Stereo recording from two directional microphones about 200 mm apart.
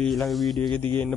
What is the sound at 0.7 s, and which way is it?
Speech, 25° right (ahead or behind).